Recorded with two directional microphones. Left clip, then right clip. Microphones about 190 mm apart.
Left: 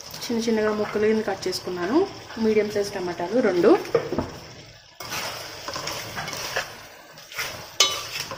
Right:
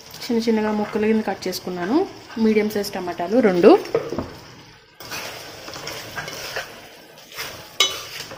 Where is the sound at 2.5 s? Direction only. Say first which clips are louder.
Right 1 dB; 45° right (ahead or behind).